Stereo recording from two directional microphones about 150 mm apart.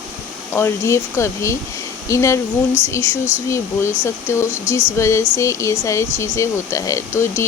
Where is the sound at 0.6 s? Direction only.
20° left (ahead or behind).